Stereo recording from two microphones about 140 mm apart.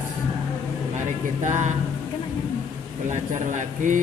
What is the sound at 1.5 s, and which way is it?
Speech, 60° right (ahead or behind).